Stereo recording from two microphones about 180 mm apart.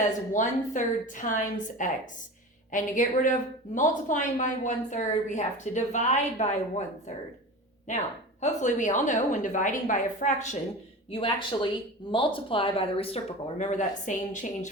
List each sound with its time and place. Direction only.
0.0 s a woman's voice: 45° left (ahead or behind)
8.4 s a woman's voice: 45° left (ahead or behind)
11.1 s a woman's voice: 30° left (ahead or behind)